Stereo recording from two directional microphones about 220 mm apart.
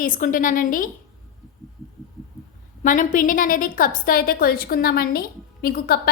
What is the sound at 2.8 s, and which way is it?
A woman's voice, 35° left (ahead or behind).